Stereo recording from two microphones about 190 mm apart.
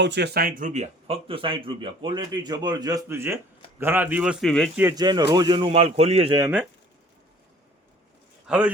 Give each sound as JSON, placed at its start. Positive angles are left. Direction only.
{"t": 0.0, "sound": "a man's voice", "side_deg": -65}
{"t": 4.8, "sound": "speech", "side_deg": -15}
{"t": 6.4, "sound": "speech", "side_deg": -5}
{"t": 8.4, "sound": "speech", "side_deg": -5}